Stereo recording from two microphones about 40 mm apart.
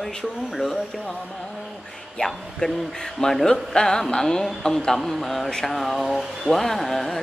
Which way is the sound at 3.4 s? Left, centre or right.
Centre.